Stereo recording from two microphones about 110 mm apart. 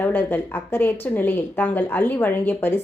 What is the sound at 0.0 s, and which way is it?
A woman's voice, 20° left (ahead or behind).